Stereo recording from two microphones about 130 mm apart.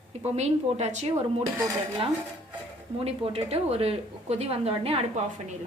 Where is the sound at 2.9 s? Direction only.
50° right (ahead or behind).